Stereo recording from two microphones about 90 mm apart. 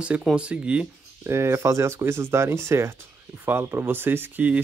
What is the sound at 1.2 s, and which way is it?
Speech, 30° right (ahead or behind).